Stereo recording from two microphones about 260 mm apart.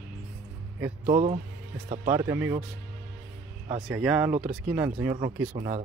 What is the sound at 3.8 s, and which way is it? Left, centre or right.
Speech, centre.